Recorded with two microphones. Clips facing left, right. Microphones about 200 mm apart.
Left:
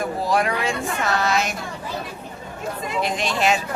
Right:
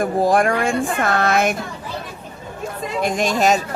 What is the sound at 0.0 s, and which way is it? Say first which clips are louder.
Speech: right 5 dB; 50° right (ahead or behind).